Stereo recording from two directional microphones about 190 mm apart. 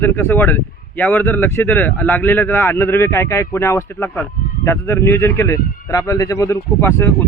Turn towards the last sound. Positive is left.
turn(degrees=15)  # may be behind; listen again after turning